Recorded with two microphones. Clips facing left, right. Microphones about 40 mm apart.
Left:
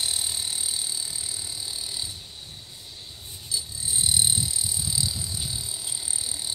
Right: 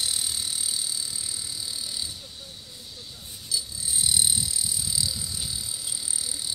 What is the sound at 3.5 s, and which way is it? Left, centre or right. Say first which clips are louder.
Frog: right 1 dB; left.